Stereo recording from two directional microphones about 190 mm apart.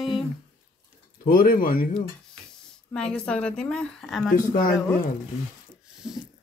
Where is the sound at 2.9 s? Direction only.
5° left (ahead or behind).